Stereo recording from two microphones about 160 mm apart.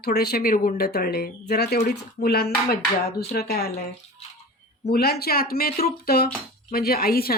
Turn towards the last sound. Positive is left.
turn(degrees=70)  # may be behind; listen again after turning